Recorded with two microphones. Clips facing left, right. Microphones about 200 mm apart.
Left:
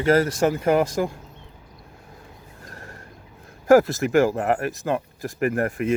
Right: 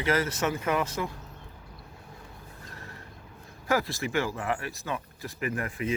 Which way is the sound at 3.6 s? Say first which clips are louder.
Left 12 dB; 45° left (ahead or behind).